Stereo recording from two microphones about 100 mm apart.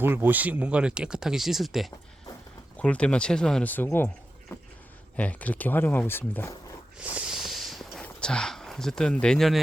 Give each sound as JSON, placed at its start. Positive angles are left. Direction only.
{"t": 0.0, "sound": "speech", "side_deg": -20}
{"t": 2.7, "sound": "speech", "side_deg": 10}
{"t": 5.1, "sound": "speech", "side_deg": 15}
{"t": 7.0, "sound": "a sound", "side_deg": -10}
{"t": 8.0, "sound": "speech", "side_deg": 10}